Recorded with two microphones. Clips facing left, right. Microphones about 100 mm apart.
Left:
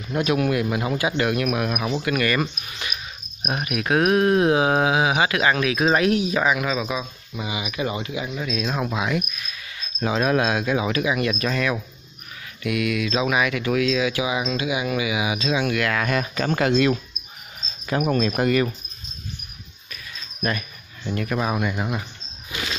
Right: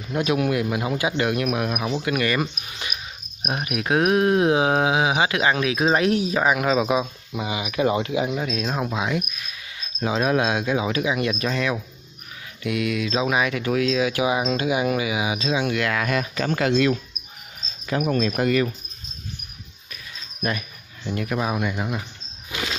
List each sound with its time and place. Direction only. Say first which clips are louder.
0.1 s speech: even; 20° right (ahead or behind); by 8.4 s 70° right (ahead or behind)
8.4 s speech: right 1 dB; 45° right (ahead or behind)
8.7 s speech: left 1 dB; 25° right (ahead or behind)
15.9 s speech: left 1 dB; 5° right (ahead or behind)
17.8 s speech: left 1 dB; 35° left (ahead or behind)
18.3 s speech: left 1 dB; 45° left (ahead or behind)
21.1 s speech: left 1 dB; 10° right (ahead or behind)